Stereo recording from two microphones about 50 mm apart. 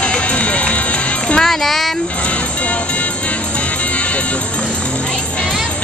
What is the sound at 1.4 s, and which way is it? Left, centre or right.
Music, centre.